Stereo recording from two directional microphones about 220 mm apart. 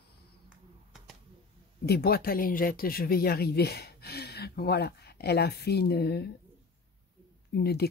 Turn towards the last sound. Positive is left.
turn(degrees=45)  # may be behind; listen again after turning